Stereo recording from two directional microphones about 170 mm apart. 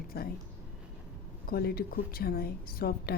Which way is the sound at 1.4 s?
65° left (ahead or behind).